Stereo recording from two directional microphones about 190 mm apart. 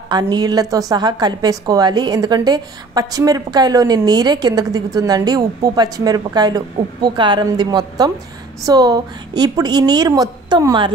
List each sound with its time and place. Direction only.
0.1 s a woman's voice: 20° right (ahead or behind)